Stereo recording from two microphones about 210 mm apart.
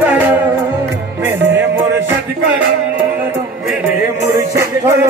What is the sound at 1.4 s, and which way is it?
Music, 55° right (ahead or behind).